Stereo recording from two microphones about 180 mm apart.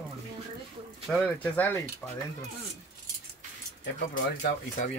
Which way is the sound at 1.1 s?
10° left (ahead or behind).